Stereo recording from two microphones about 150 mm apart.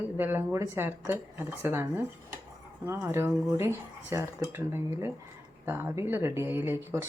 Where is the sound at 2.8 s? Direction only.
15° right (ahead or behind).